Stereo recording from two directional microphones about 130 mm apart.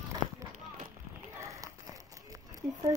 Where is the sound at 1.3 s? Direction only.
25° right (ahead or behind).